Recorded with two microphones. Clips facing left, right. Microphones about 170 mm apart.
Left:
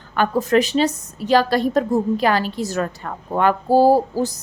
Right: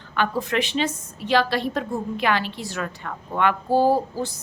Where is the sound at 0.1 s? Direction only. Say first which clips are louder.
Left 7 dB; 40° left (ahead or behind).